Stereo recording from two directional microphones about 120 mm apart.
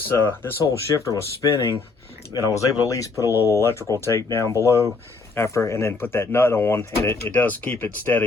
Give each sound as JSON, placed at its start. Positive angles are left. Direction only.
{"t": 0.3, "sound": "speech", "side_deg": 20}
{"t": 3.2, "sound": "speech", "side_deg": -20}
{"t": 3.5, "sound": "speech", "side_deg": 20}